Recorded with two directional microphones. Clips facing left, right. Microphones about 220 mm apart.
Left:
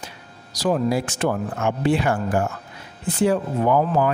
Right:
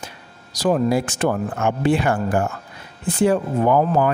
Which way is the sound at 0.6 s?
50° right (ahead or behind).